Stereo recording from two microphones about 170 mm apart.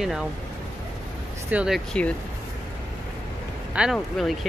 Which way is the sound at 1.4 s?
5° right (ahead or behind).